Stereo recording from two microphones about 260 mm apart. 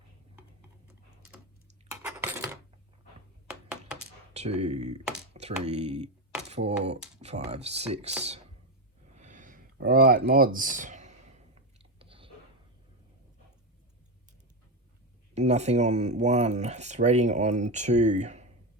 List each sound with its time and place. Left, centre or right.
1.9 s cutlery: centre
4.4 s speech: right
9.2 s a sound: right
15.4 s speech: right